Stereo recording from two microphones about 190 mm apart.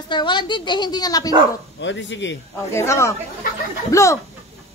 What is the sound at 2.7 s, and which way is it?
Speech, 15° left (ahead or behind).